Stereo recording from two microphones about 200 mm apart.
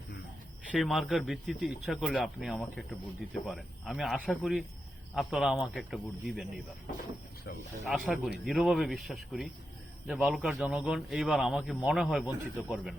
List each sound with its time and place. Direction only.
0.7 s speech: centre (ahead or behind)
7.9 s speech: centre (ahead or behind)